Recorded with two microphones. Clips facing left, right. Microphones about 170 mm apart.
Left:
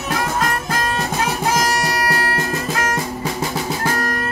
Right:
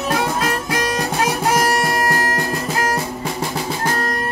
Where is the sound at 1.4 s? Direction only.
60° right (ahead or behind).